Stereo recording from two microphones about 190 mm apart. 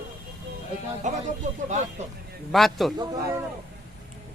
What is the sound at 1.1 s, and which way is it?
Speech, 40° right (ahead or behind).